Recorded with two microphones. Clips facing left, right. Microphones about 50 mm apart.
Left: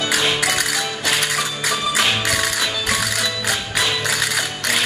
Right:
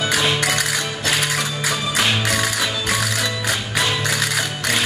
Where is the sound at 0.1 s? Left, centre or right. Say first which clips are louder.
Left 1 dB; centre.